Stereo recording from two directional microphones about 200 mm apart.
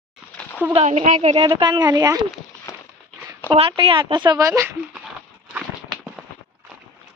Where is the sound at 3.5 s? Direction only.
30° right (ahead or behind).